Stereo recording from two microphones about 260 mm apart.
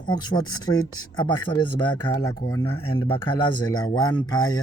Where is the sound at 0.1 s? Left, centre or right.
Centre.